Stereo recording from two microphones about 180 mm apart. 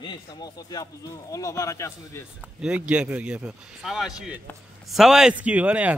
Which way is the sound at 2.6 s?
5° right (ahead or behind).